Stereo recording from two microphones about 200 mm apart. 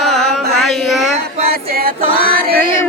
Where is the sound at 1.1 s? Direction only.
30° right (ahead or behind).